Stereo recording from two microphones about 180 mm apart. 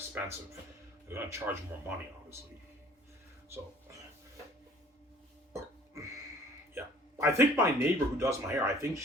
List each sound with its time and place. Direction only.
0.1 s a man's voice: 10° right (ahead or behind)
5.5 s music: 15° right (ahead or behind)
6.7 s speech: 15° right (ahead or behind)